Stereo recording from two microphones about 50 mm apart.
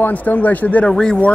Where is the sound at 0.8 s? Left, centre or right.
Centre.